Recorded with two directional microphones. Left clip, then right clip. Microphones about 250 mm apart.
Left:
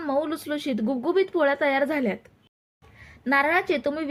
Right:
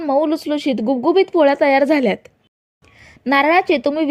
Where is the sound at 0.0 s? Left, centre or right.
Right.